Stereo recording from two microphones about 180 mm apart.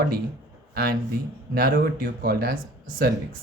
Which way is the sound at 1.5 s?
55° right (ahead or behind).